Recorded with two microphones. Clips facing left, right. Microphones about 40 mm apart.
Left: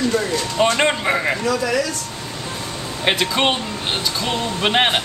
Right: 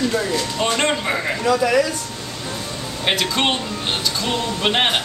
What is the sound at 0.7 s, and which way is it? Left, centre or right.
Speech, centre.